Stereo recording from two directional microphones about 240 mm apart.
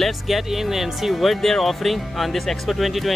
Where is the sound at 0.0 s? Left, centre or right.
Centre.